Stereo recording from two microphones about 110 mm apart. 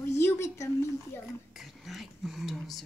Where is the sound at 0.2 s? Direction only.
25° left (ahead or behind).